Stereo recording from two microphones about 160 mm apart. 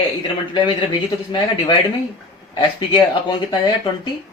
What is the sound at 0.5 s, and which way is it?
Speech, 30° left (ahead or behind).